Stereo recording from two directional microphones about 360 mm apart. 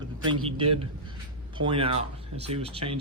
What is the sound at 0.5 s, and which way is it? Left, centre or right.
Speech, centre.